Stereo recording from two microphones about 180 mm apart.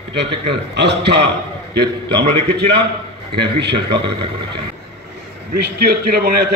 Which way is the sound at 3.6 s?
70° right (ahead or behind).